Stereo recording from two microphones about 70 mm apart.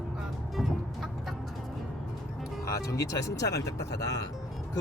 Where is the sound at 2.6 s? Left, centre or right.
Left.